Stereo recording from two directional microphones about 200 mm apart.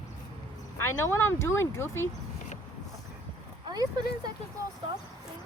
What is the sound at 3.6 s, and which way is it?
Speech, 20° right (ahead or behind).